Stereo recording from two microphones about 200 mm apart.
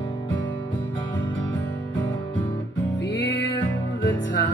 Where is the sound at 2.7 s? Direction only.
65° left (ahead or behind).